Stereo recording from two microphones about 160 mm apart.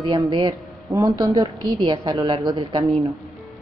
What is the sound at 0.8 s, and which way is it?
A woman's voice, 20° right (ahead or behind).